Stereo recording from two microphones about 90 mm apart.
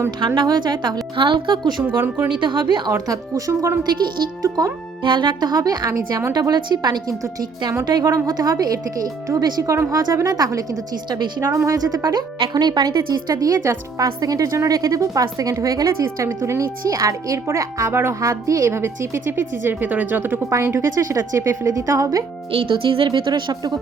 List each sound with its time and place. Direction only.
0.3 s a woman's voice: 50° right (ahead or behind)
2.0 s speech: 20° right (ahead or behind)
2.4 s a woman's voice: 60° right (ahead or behind)
2.9 s a woman's voice: 40° right (ahead or behind)
5.0 s speech: 60° right (ahead or behind); by 5.9 s 45° right (ahead or behind)
5.9 s a woman's voice: 35° right (ahead or behind)
6.3 s a woman's voice: 50° right (ahead or behind); by 20.4 s 20° right (ahead or behind)
20.5 s a woman's voice: 30° right (ahead or behind)
22.5 s a woman's voice: 75° right (ahead or behind); by 23.7 s 55° right (ahead or behind)